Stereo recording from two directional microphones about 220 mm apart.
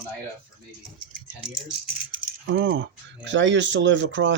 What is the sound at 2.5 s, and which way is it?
Speech, 55° right (ahead or behind).